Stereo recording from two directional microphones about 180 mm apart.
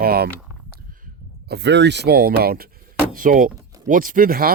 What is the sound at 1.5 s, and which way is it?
Speech, 70° right (ahead or behind).